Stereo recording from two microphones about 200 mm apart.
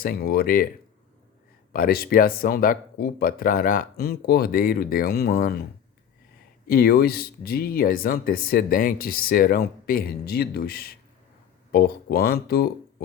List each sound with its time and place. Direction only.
0.0 s speech: 50° left (ahead or behind)
1.7 s speech: 50° left (ahead or behind)
6.7 s speech: 50° left (ahead or behind)